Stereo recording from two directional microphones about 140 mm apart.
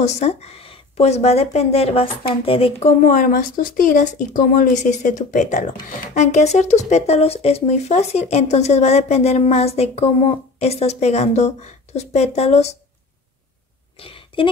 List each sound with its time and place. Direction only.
0.0 s speech: 50° left (ahead or behind)
3.0 s speech: 65° left (ahead or behind); by 12.7 s 50° left (ahead or behind)
13.9 s a sound: 40° left (ahead or behind)